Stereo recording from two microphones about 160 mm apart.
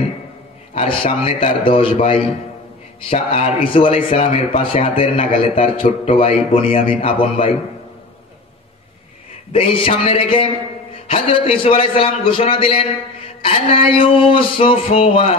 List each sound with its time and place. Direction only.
0.7 s a man's voice: 35° left (ahead or behind)
9.5 s a man's voice: 35° left (ahead or behind)